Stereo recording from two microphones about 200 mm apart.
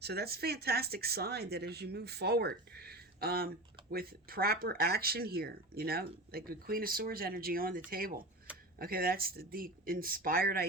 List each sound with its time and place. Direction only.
0.0 s speech: 50° right (ahead or behind)